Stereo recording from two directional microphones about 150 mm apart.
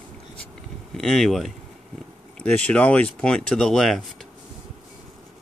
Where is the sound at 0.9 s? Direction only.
Centre (ahead or behind).